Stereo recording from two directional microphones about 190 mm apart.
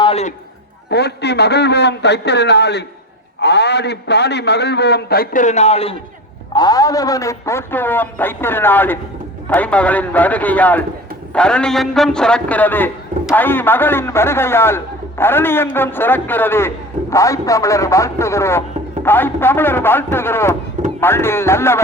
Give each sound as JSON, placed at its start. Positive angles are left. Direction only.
{"t": 0.0, "sound": "a sound", "side_deg": 35}
{"t": 0.9, "sound": "a man's voice", "side_deg": 60}
{"t": 6.5, "sound": "a man's voice", "side_deg": 20}